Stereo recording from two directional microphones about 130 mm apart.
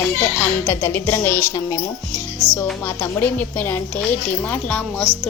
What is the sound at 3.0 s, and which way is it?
Music, 15° left (ahead or behind).